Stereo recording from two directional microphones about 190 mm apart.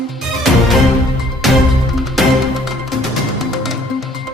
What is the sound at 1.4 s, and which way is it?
Music, centre (ahead or behind).